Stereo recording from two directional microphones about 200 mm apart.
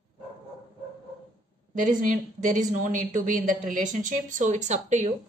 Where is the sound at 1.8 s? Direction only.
40° right (ahead or behind).